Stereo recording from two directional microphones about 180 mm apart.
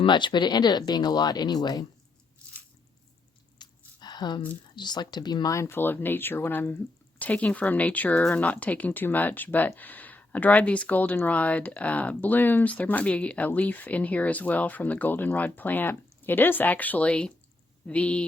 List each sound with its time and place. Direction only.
0.0 s speech: 25° left (ahead or behind)
3.6 s a sound: 25° left (ahead or behind)
4.7 s speech: 25° left (ahead or behind); by 18.3 s 5° left (ahead or behind)